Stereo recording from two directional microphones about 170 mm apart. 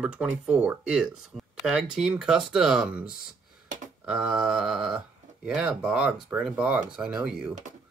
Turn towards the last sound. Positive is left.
turn(degrees=-5)  # may be behind; listen again after turning